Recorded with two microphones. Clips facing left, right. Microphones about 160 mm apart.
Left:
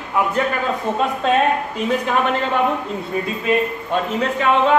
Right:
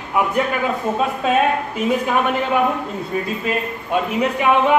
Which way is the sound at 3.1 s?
Centre (ahead or behind).